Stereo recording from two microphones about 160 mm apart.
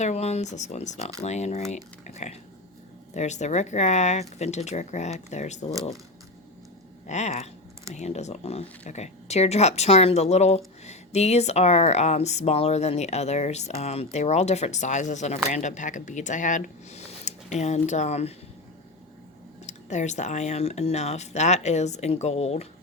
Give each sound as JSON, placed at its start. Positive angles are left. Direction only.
{"t": 0.0, "sound": "speech", "side_deg": 45}
{"t": 7.1, "sound": "speech", "side_deg": 45}
{"t": 19.6, "sound": "speech", "side_deg": 50}